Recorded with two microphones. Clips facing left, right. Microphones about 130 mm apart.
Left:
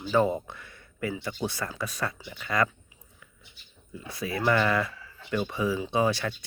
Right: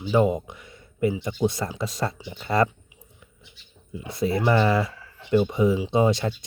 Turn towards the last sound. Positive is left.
turn(degrees=-25)  # may be behind; listen again after turning